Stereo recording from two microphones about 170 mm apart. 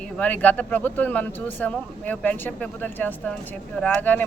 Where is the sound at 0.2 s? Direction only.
10° left (ahead or behind).